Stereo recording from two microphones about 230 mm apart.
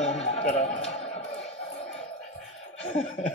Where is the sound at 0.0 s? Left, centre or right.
Left.